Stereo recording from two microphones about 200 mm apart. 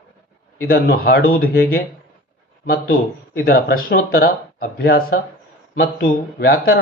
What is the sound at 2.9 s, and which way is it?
A man's voice, 45° left (ahead or behind).